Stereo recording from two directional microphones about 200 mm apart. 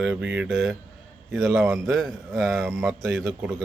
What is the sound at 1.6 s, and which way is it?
Speech, 15° right (ahead or behind).